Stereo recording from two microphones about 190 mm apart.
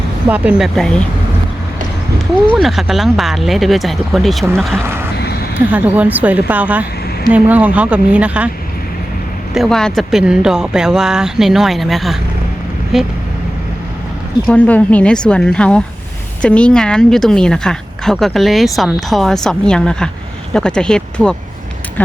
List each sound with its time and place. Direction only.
0.3 s speech: 5° right (ahead or behind)
2.5 s speech: centre (ahead or behind)
5.1 s a sound: 55° left (ahead or behind)
5.5 s a woman's voice: 10° right (ahead or behind)
9.6 s speech: centre (ahead or behind)
14.4 s speech: 5° left (ahead or behind)